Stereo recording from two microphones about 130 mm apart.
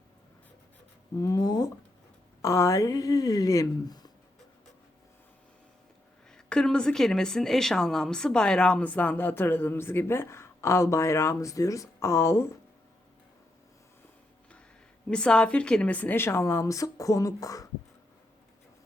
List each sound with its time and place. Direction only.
1.2 s a sound: 30° left (ahead or behind)
2.4 s speech: 25° left (ahead or behind)
6.3 s speech: 5° left (ahead or behind); by 12.5 s 20° left (ahead or behind)
15.1 s speech: 5° left (ahead or behind); by 17.7 s 25° left (ahead or behind)